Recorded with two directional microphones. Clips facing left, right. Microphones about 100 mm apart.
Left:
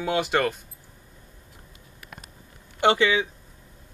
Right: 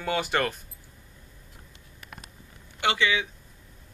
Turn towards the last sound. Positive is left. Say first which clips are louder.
# left 5 dB
turn(degrees=35)  # may be behind; listen again after turning